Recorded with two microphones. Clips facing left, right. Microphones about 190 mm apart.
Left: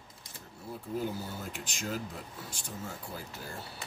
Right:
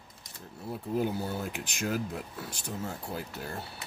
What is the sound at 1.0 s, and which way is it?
Speech, 65° right (ahead or behind).